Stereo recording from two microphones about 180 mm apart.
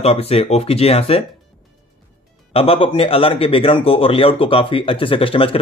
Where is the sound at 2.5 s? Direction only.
30° left (ahead or behind).